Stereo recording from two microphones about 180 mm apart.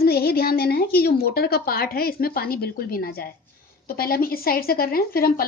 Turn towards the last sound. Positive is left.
turn(degrees=55)  # may be behind; listen again after turning